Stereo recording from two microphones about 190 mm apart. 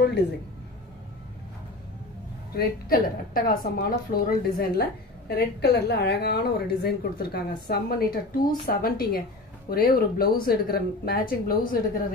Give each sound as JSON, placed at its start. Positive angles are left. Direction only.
{"t": 2.5, "sound": "a woman's voice", "side_deg": 50}